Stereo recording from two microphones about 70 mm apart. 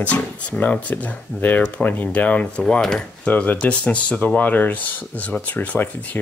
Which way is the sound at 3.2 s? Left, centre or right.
Left.